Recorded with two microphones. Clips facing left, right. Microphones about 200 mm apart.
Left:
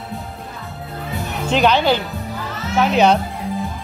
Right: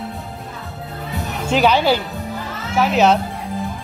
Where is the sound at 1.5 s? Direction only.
10° right (ahead or behind).